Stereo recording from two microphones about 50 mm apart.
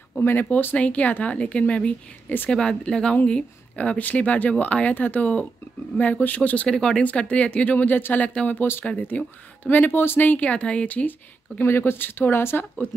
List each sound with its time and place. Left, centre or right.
0.2 s speech: left
0.7 s speech: left
2.2 s speech: left
2.5 s speech: centre; by 6.7 s left
6.7 s speech: centre
7.0 s speech: left
9.1 s speech: left
11.6 s speech: left